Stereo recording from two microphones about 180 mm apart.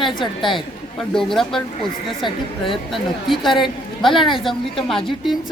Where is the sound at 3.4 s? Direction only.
25° left (ahead or behind).